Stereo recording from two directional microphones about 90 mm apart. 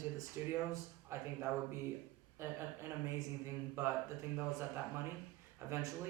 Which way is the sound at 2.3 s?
30° right (ahead or behind).